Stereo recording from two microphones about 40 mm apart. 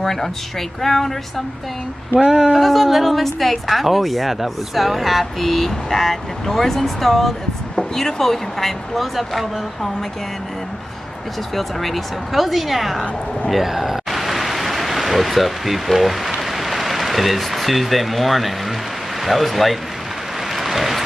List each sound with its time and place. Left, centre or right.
0.0 s speech: centre
2.2 s speech: right
2.5 s speech: centre
11.5 s speech: centre
13.5 s a sound: centre
19.2 s speech: centre
20.5 s vehicle: centre